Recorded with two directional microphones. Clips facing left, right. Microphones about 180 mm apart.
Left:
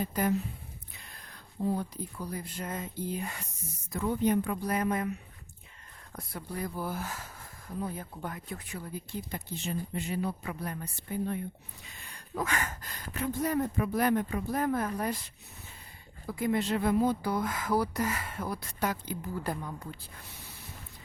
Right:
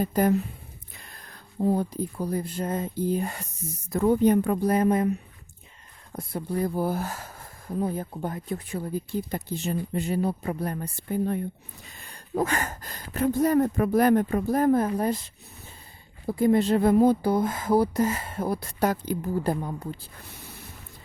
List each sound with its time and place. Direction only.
0.0 s a woman's voice: 40° right (ahead or behind)
4.6 s speech: 30° right (ahead or behind)
6.1 s speech: 25° right (ahead or behind)
17.1 s speech: 30° right (ahead or behind)
19.5 s speech: 30° right (ahead or behind)